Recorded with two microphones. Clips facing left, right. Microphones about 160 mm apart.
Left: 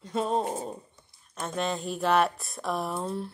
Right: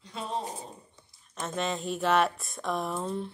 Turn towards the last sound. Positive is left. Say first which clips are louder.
# left 1 dB
turn(degrees=5)  # may be behind; listen again after turning